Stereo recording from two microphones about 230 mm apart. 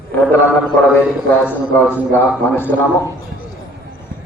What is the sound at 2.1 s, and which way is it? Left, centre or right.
Speech, centre.